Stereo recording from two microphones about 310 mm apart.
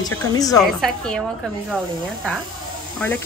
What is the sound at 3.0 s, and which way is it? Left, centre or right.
Speech, centre.